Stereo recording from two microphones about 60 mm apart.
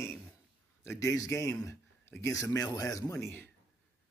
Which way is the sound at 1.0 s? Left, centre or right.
Left.